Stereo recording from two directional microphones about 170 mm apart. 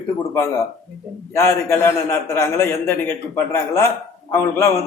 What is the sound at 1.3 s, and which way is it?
Speech, 15° left (ahead or behind).